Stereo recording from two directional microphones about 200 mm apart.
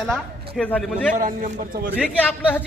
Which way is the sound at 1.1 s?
40° right (ahead or behind).